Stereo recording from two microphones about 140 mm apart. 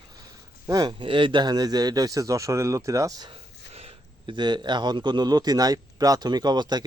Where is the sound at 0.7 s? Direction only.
30° right (ahead or behind).